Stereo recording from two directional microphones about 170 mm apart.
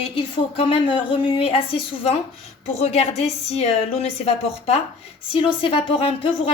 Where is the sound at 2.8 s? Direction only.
40° left (ahead or behind).